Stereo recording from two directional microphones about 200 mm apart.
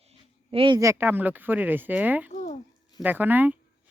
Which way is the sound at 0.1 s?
25° right (ahead or behind).